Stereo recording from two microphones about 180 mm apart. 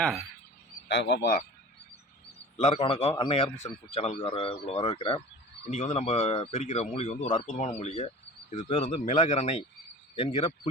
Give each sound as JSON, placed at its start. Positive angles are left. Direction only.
{"t": 0.9, "sound": "speech", "side_deg": 75}
{"t": 2.6, "sound": "speech", "side_deg": 40}